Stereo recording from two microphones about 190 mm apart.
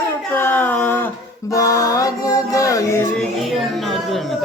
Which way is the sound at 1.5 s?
15° left (ahead or behind).